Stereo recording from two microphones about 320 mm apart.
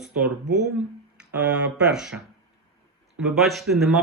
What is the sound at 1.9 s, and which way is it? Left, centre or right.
Speech, centre.